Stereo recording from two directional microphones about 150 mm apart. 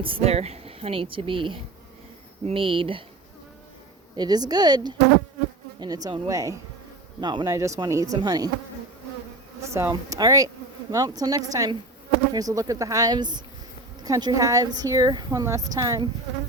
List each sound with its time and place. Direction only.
0.0 s a woman's voice: 40° right (ahead or behind)
4.2 s speech: 25° right (ahead or behind)
9.7 s speech: 20° right (ahead or behind)